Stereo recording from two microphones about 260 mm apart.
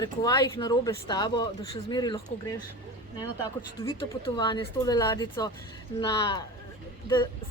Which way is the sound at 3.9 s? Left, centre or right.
Centre.